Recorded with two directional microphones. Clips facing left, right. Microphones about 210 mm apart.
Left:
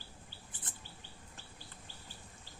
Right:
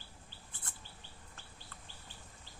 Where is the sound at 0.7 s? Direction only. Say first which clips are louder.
Left 1 dB; 20° left (ahead or behind).